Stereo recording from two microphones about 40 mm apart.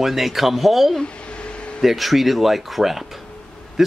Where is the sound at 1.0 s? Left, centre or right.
Left.